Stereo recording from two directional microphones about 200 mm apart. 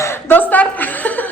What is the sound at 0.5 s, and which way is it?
Speech, 10° left (ahead or behind).